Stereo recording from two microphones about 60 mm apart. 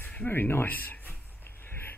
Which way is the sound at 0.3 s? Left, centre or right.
Left.